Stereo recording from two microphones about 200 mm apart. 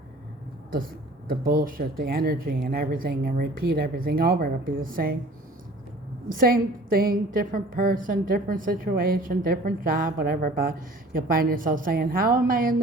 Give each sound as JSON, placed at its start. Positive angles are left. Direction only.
{"t": 1.3, "sound": "a woman's voice", "side_deg": -45}
{"t": 6.2, "sound": "a woman's voice", "side_deg": -45}